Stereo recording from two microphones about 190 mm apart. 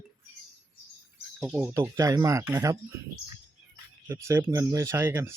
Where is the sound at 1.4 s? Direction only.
10° right (ahead or behind).